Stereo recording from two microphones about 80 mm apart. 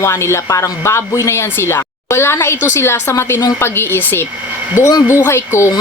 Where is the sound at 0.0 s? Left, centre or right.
Left.